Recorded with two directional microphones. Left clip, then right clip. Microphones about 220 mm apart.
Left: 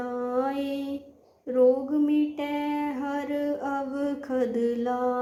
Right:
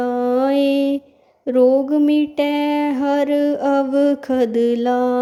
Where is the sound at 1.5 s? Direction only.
45° right (ahead or behind).